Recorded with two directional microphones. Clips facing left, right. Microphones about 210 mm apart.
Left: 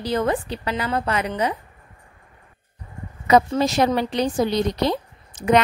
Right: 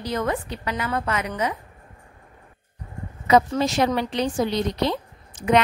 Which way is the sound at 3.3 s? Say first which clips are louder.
Left 2 dB; 40° left (ahead or behind).